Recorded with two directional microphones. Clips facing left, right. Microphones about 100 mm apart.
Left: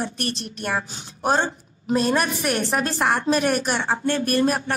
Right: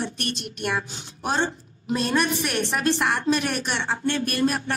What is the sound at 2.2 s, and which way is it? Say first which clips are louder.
A woman's voice: left 1 dB; 40° left (ahead or behind).